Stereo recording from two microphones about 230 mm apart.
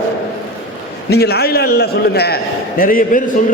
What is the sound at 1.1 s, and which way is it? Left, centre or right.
A man's voice, left.